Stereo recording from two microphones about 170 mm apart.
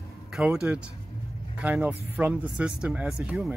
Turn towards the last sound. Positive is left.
turn(degrees=-5)  # may be behind; listen again after turning